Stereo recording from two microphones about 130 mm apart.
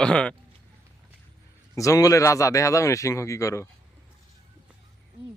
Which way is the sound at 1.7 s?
25° left (ahead or behind).